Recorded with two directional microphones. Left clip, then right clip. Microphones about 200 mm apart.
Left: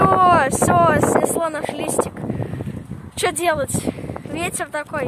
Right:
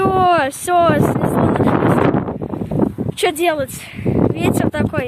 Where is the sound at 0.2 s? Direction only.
Centre (ahead or behind).